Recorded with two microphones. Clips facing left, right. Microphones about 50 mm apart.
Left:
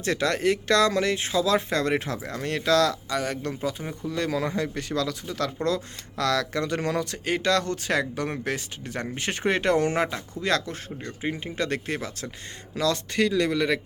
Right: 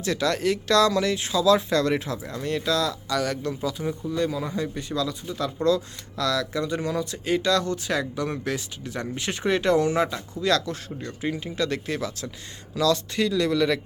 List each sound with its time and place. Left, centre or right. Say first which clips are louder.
0.0 s speech: even; left
3.1 s speech: right 2 dB; left
4.1 s speech: left 2 dB; left
5.6 s speech: right 4 dB; left